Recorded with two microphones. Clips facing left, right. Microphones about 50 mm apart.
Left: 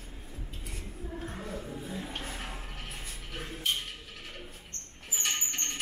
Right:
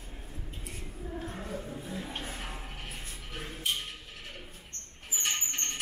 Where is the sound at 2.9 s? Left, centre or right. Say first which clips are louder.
Left 1 dB; centre.